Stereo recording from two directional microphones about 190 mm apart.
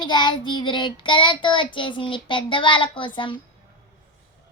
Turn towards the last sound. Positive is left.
turn(degrees=25)  # may be behind; listen again after turning